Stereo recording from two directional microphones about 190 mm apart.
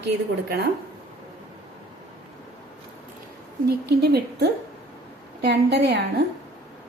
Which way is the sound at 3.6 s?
60° right (ahead or behind).